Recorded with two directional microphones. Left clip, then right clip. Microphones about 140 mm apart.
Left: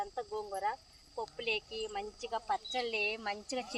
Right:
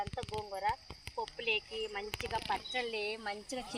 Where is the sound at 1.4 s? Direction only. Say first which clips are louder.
Right 1 dB; 30° left (ahead or behind).